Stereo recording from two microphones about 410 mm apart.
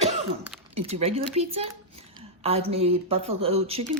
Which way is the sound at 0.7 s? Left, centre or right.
Centre.